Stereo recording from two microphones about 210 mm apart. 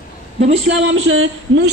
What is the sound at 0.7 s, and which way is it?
Speech, 60° right (ahead or behind).